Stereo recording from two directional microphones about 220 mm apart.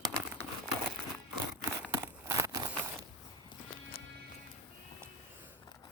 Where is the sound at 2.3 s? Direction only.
15° right (ahead or behind).